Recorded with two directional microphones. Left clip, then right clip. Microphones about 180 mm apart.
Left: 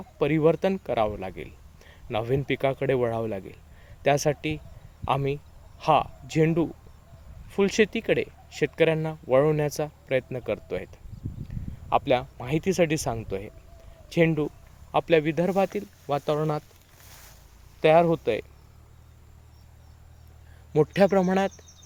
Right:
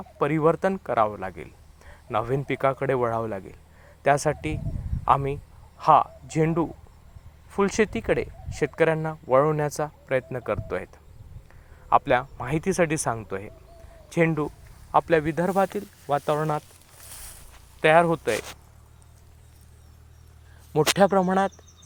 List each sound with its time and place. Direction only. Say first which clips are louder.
0.2 s speech: even; 15° left (ahead or behind)
17.0 s a sound: right 5 dB; 45° right (ahead or behind)
17.7 s speech: right 1 dB; 10° left (ahead or behind)
20.7 s speech: right 1 dB; 10° left (ahead or behind)